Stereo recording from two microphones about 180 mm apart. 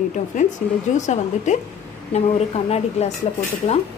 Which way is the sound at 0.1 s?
40° left (ahead or behind).